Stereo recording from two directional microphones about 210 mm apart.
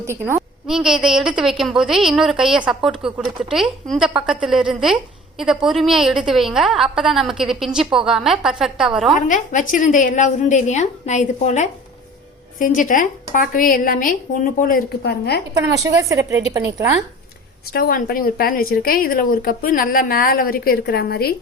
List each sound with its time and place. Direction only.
0.0 s a woman's voice: 10° right (ahead or behind)
9.2 s a woman's voice: 40° left (ahead or behind)
16.0 s a woman's voice: 15° right (ahead or behind)
17.7 s a woman's voice: 45° left (ahead or behind)